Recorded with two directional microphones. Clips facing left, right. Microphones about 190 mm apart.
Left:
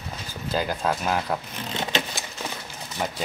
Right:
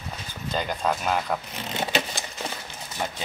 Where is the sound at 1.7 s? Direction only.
10° right (ahead or behind).